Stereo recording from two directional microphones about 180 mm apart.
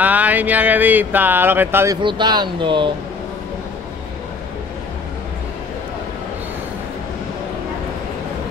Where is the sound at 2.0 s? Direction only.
25° right (ahead or behind).